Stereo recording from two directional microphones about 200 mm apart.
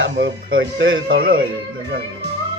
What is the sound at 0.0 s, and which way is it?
Speech, 70° right (ahead or behind).